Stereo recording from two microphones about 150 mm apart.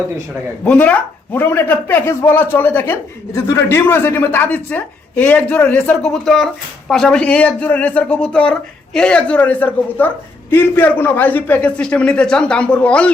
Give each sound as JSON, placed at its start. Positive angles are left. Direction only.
{"t": 0.6, "sound": "a man's voice", "side_deg": 10}